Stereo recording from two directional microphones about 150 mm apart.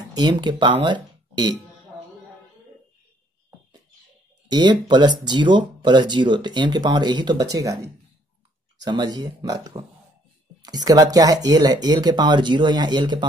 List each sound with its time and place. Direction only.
0.1 s speech: 30° right (ahead or behind)
4.5 s speech: 30° right (ahead or behind)